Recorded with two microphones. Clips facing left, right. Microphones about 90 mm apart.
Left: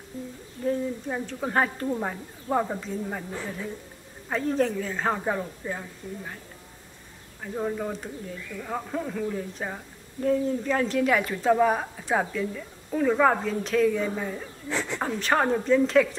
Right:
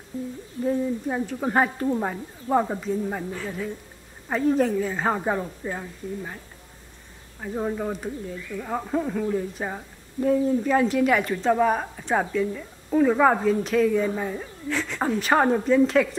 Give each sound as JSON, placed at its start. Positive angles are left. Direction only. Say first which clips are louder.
{"t": 0.7, "sound": "speech", "louder": "right 3 dB", "side_deg": -10}
{"t": 4.3, "sound": "speech", "louder": "right 4 dB", "side_deg": -5}
{"t": 7.4, "sound": "a woman's voice", "louder": "right 2 dB", "side_deg": -10}
{"t": 14.7, "sound": "speech", "louder": "right 1 dB", "side_deg": 20}
{"t": 15.0, "sound": "speech", "louder": "right 4 dB", "side_deg": -5}